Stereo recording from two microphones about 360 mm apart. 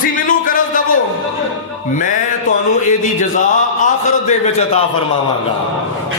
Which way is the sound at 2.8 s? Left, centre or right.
Left.